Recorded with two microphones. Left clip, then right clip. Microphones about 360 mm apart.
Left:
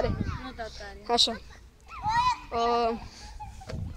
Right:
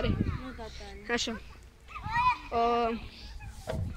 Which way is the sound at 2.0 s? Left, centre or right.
Left.